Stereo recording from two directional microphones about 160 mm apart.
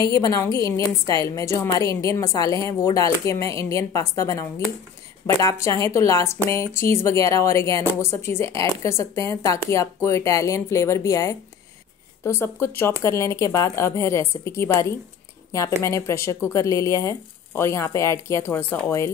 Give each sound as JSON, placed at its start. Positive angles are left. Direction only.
{"t": 0.0, "sound": "speech", "side_deg": 25}